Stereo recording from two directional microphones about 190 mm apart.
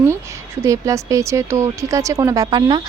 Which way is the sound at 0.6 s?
15° right (ahead or behind).